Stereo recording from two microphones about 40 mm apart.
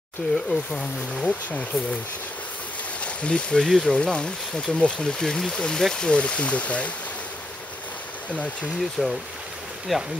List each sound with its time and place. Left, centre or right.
0.3 s speech: centre
1.2 s speech: left
3.0 s speech: left
3.6 s speech: centre
3.9 s speech: left
5.2 s speech: centre
6.0 s speech: left
9.0 s speech: centre
9.9 s speech: centre